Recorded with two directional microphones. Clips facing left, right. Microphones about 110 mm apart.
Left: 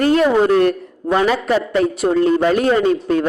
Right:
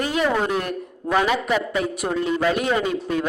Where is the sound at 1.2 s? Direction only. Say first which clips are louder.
Left 5 dB; 40° left (ahead or behind).